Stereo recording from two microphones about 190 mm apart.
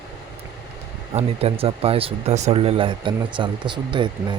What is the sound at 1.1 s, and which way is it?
Speech, 30° right (ahead or behind).